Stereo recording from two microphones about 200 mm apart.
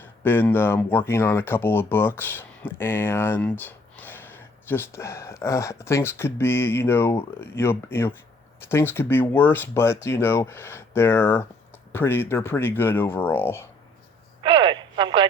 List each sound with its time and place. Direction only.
0.0 s speech: 10° left (ahead or behind)
14.4 s radio: 25° right (ahead or behind)